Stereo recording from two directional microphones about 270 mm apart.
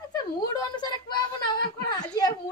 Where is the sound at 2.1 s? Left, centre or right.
Centre.